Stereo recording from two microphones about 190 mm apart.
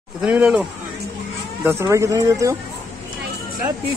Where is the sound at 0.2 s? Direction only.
5° right (ahead or behind).